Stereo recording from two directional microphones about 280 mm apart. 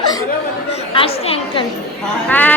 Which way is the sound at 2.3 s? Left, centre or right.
Centre.